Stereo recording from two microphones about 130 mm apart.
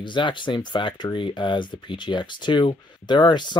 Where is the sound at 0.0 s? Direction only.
40° left (ahead or behind).